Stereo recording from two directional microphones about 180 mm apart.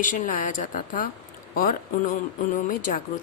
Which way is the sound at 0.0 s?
45° left (ahead or behind).